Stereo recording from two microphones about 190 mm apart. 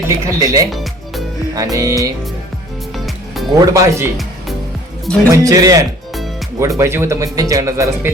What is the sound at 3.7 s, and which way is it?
Speech, 15° right (ahead or behind).